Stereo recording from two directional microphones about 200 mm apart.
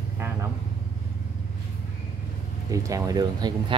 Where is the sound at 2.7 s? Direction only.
15° right (ahead or behind).